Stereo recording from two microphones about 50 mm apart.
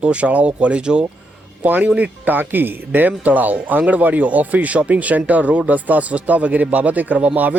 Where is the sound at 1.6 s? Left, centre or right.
Right.